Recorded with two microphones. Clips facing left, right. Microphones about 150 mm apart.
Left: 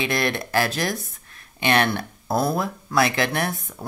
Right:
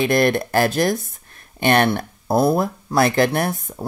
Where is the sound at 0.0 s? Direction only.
45° right (ahead or behind).